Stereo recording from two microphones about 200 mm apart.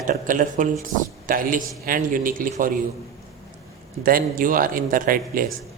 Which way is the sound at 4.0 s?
45° right (ahead or behind).